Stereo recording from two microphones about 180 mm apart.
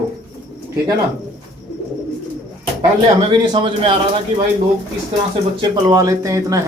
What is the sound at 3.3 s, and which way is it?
Speech, 30° right (ahead or behind).